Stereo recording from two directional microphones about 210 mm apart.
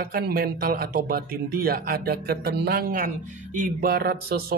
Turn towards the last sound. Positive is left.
turn(degrees=-45)  # may be behind; listen again after turning